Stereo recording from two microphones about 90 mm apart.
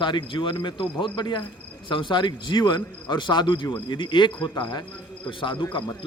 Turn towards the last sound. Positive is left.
turn(degrees=65)  # may be behind; listen again after turning